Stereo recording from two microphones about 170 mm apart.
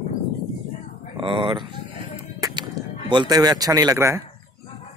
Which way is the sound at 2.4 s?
20° right (ahead or behind).